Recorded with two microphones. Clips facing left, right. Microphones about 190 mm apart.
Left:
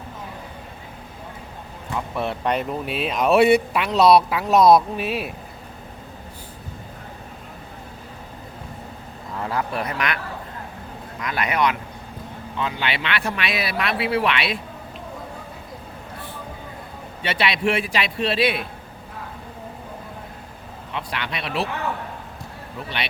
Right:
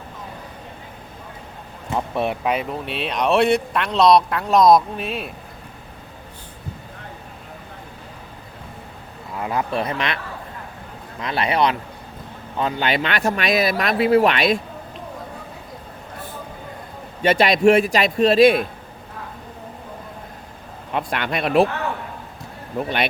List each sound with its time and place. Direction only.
2.1 s speech: 15° right (ahead or behind)
2.4 s speech: 5° right (ahead or behind)
9.4 s speech: 20° right (ahead or behind)
11.2 s speech: 30° right (ahead or behind)
12.5 s speech: 40° right (ahead or behind)
17.2 s a man's voice: 45° right (ahead or behind)
20.9 s a man's voice: 50° right (ahead or behind)
22.8 s a man's voice: 50° right (ahead or behind)